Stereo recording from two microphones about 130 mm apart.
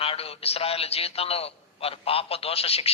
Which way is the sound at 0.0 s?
50° left (ahead or behind).